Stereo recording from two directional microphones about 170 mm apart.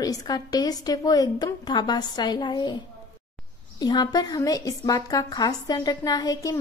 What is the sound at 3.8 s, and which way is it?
A woman's voice, 25° left (ahead or behind).